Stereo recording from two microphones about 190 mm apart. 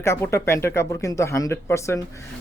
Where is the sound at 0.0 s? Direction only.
15° left (ahead or behind).